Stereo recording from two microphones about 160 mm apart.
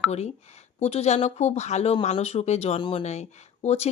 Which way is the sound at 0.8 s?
45° left (ahead or behind).